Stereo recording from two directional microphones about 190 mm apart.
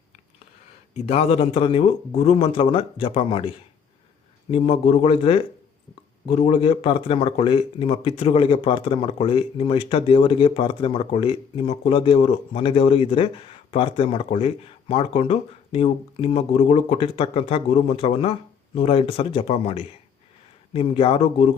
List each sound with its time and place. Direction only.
0.9 s speech: 30° left (ahead or behind)
4.5 s speech: 30° left (ahead or behind)